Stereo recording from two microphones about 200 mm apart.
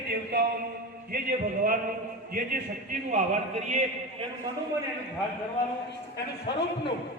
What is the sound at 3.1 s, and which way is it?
Speech, 35° right (ahead or behind).